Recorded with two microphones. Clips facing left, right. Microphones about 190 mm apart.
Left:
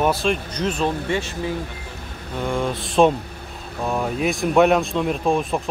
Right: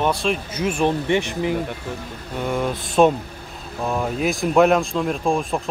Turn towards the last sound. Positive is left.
turn(degrees=5)  # may be behind; listen again after turning